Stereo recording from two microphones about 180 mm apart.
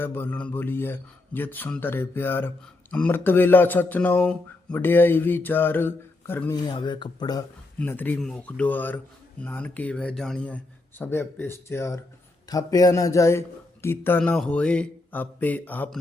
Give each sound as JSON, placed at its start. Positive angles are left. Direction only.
{"t": 0.0, "sound": "speech", "side_deg": 10}
{"t": 6.7, "sound": "speech", "side_deg": 25}
{"t": 7.8, "sound": "speech", "side_deg": 10}